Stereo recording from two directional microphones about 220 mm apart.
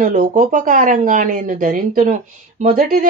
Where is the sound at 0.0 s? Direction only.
35° right (ahead or behind).